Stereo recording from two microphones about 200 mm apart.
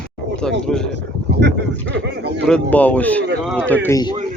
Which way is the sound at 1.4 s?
60° right (ahead or behind).